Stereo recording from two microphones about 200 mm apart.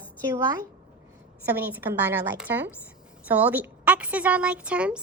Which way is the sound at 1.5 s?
10° right (ahead or behind).